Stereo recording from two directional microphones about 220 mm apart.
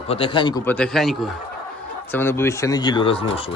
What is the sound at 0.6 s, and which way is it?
Speech, 5° left (ahead or behind).